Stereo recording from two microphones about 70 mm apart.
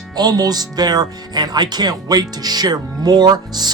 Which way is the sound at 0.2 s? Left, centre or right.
Right.